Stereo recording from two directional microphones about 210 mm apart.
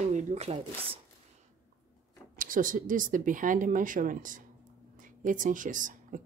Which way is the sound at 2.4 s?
40° right (ahead or behind).